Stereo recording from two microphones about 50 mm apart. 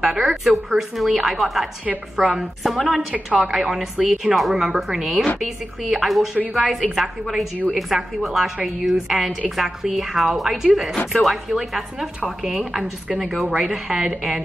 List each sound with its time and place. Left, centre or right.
0.0 s a woman's voice: centre
13.2 s a woman's voice: centre